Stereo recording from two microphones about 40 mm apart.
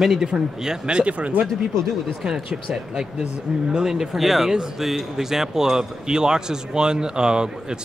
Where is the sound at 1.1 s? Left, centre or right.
Right.